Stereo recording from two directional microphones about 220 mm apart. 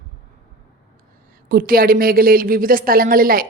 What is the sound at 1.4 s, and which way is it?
A woman's voice, 40° right (ahead or behind).